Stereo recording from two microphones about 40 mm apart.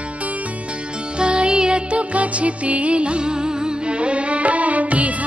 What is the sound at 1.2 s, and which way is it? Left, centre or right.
Music, right.